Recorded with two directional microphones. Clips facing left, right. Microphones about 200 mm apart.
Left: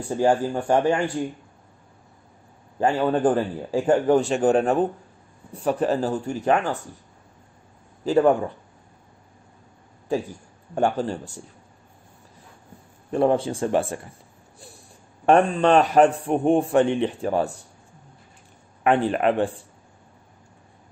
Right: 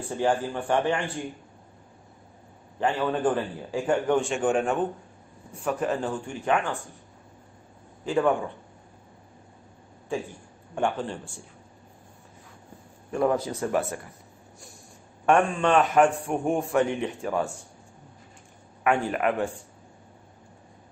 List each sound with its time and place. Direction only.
0.2 s a man's voice: 40° left (ahead or behind)
2.8 s a man's voice: 40° left (ahead or behind)
8.0 s speech: 40° left (ahead or behind)
10.1 s a man's voice: 40° left (ahead or behind)
13.1 s a man's voice: 30° left (ahead or behind)
15.2 s a man's voice: 35° left (ahead or behind)
18.9 s a man's voice: 30° left (ahead or behind)